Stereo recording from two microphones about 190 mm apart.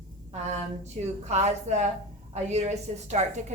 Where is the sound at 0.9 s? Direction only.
35° right (ahead or behind).